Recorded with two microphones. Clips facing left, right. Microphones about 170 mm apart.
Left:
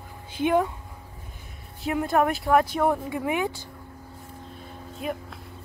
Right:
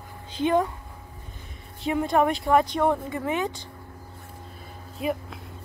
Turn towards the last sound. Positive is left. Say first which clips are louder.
# right 3 dB
turn(degrees=0)  # may be behind; listen again after turning